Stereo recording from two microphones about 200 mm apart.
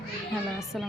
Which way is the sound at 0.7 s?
Centre (ahead or behind).